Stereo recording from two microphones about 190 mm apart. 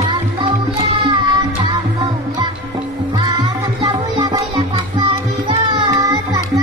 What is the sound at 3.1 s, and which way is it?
Music, 20° right (ahead or behind).